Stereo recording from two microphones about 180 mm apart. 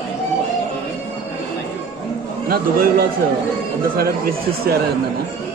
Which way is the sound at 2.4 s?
55° right (ahead or behind).